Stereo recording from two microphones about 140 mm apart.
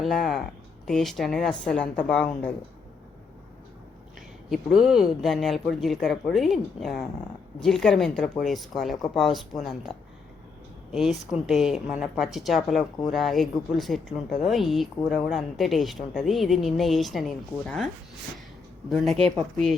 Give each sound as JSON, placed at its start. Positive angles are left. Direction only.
{"t": 0.0, "sound": "a woman's voice", "side_deg": 0}
{"t": 4.4, "sound": "a woman's voice", "side_deg": -5}
{"t": 18.9, "sound": "a woman's voice", "side_deg": 0}